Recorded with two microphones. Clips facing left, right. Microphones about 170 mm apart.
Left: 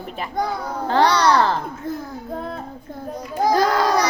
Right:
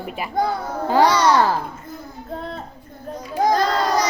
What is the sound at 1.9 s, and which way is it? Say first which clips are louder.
Child singing: left 9 dB; 90° left.